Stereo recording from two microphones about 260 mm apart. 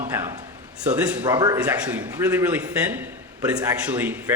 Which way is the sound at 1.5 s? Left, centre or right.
Centre.